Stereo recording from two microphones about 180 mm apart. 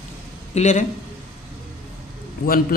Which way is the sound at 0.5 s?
40° left (ahead or behind).